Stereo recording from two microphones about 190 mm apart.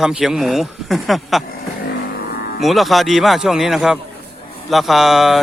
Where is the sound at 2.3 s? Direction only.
55° left (ahead or behind).